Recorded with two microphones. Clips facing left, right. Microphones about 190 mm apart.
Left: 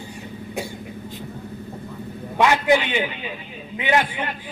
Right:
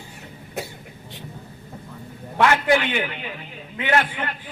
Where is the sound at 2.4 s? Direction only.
15° left (ahead or behind).